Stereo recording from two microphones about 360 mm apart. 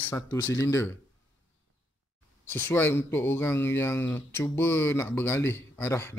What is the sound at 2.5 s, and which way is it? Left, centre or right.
Speech, centre.